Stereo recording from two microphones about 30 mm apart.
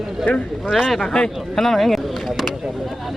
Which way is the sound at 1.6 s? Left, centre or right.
Centre.